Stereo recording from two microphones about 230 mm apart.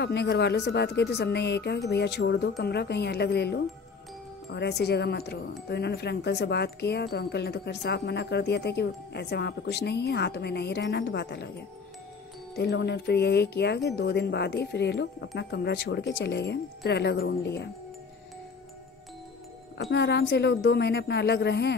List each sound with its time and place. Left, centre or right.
0.0 s speech: left
19.9 s speech: left